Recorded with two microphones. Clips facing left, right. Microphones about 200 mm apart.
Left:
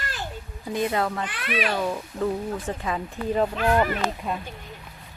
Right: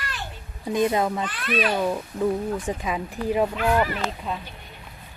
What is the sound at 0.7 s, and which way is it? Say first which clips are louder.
Speech: right 3 dB; 20° right (ahead or behind).